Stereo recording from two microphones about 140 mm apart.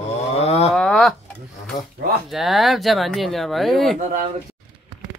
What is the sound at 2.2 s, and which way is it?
Speech, centre (ahead or behind).